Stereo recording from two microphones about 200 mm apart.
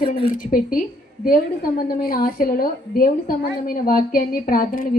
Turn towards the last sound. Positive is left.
turn(degrees=45)  # may be behind; listen again after turning